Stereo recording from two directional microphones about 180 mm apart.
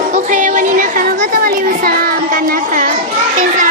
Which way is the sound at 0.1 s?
45° right (ahead or behind).